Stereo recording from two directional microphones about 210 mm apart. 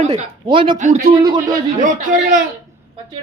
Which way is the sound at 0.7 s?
35° right (ahead or behind).